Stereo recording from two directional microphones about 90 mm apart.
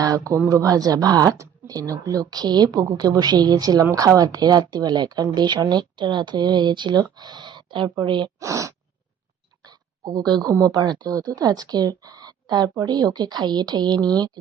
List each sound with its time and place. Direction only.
0.0 s speech: 40° right (ahead or behind); by 8.3 s 60° right (ahead or behind)
8.4 s speech: 35° right (ahead or behind)
9.6 s a sound: 45° right (ahead or behind)
10.5 s speech: 45° right (ahead or behind)